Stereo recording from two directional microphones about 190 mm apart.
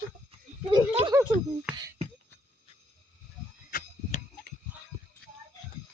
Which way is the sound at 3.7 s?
50° left (ahead or behind).